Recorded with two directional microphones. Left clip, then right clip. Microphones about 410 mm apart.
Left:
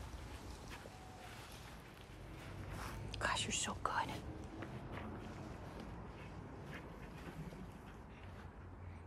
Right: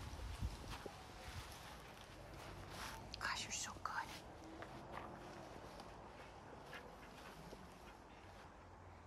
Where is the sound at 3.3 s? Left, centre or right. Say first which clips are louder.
Left 6 dB; centre.